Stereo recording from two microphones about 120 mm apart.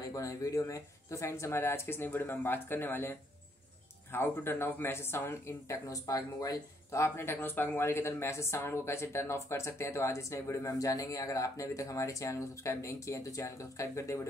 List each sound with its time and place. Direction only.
0.0 s speech: 30° left (ahead or behind)